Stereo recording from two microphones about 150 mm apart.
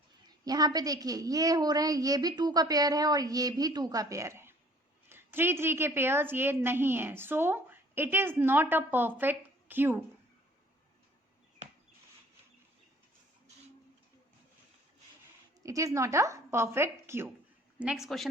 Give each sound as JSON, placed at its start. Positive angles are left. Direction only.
{"t": 0.3, "sound": "a woman's voice", "side_deg": -25}
{"t": 15.6, "sound": "a woman's voice", "side_deg": -20}
{"t": 17.7, "sound": "a woman's voice", "side_deg": -5}